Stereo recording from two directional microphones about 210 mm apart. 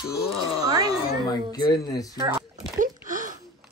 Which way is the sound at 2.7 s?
40° right (ahead or behind).